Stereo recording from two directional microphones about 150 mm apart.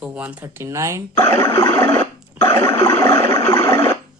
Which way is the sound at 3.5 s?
15° left (ahead or behind).